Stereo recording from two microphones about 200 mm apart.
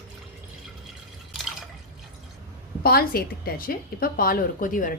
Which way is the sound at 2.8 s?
50° left (ahead or behind).